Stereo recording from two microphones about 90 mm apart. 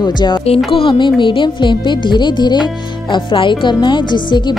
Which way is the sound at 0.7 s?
75° left (ahead or behind).